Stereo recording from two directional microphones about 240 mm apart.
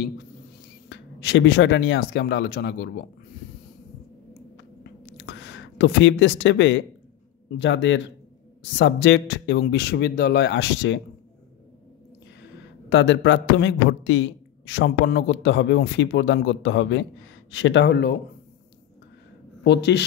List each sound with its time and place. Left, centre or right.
0.8 s a man's voice: left
5.1 s a sound: left
7.5 s a man's voice: left
12.9 s a man's voice: left
19.6 s a man's voice: left